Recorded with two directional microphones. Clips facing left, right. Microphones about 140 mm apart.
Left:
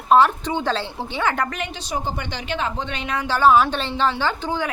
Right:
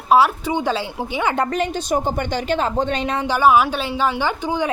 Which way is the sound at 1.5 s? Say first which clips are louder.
Right 8 dB; 40° right (ahead or behind).